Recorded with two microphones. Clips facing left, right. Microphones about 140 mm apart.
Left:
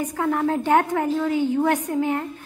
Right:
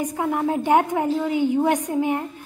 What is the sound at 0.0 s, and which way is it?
A woman's voice, 15° right (ahead or behind).